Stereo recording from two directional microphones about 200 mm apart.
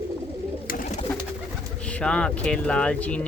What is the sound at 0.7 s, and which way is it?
Bird, 45° left (ahead or behind).